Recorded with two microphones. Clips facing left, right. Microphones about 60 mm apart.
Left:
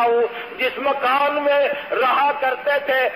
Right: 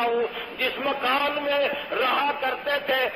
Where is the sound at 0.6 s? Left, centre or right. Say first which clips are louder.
Left 6 dB; left.